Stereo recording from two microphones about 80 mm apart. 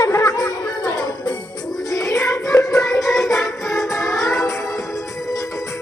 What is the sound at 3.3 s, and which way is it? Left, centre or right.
Music, centre.